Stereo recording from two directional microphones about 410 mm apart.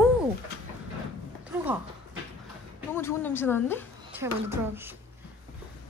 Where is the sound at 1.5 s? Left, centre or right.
Centre.